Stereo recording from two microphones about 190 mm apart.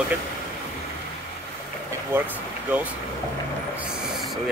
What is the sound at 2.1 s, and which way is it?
Speech, 10° right (ahead or behind).